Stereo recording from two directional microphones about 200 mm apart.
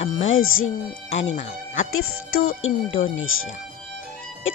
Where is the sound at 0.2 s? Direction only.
85° left.